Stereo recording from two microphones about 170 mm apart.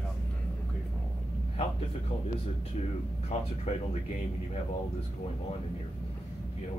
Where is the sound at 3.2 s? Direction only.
40° left (ahead or behind).